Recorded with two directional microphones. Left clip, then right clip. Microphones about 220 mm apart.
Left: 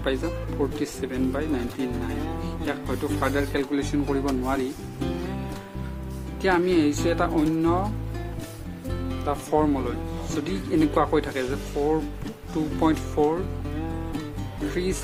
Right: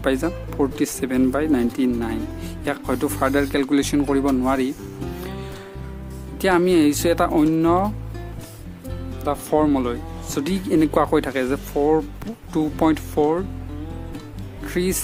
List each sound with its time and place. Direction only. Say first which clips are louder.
0.0 s speech: right 5 dB; 45° right (ahead or behind)
2.6 s speech: right 6 dB; 45° right (ahead or behind)
6.4 s speech: right 4 dB; 45° right (ahead or behind)
9.2 s speech: right 4 dB; 35° right (ahead or behind)
14.8 s speech: right 6 dB; 45° right (ahead or behind)